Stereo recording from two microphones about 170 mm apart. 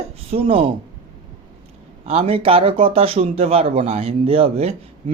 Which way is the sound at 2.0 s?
35° right (ahead or behind).